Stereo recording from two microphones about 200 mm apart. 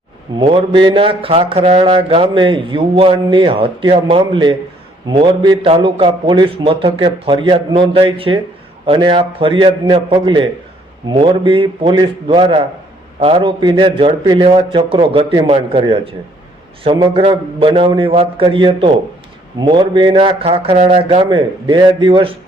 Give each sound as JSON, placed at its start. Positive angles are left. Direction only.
{"t": 0.3, "sound": "speech", "side_deg": -25}